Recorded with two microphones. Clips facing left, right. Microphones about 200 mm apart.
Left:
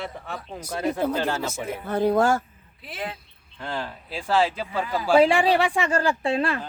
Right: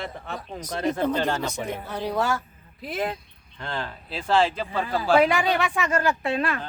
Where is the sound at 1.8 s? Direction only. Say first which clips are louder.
Left 8 dB; 55° left (ahead or behind).